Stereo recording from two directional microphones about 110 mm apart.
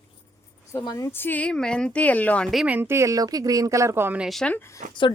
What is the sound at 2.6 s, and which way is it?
Speech, 20° right (ahead or behind).